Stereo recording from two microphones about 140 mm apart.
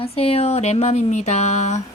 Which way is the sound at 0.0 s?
45° left (ahead or behind).